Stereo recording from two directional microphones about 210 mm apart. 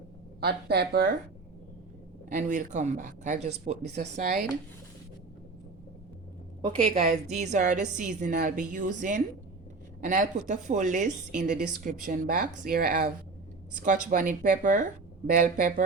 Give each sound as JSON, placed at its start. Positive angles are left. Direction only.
{"t": 0.3, "sound": "speech", "side_deg": -50}
{"t": 2.3, "sound": "a woman's voice", "side_deg": -35}
{"t": 6.6, "sound": "a woman's voice", "side_deg": -25}